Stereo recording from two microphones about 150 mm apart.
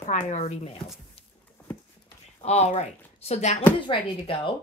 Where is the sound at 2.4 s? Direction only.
45° left (ahead or behind).